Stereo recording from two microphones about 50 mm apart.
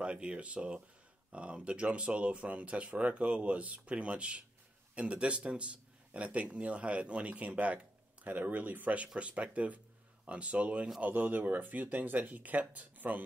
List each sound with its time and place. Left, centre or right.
0.0 s speech: right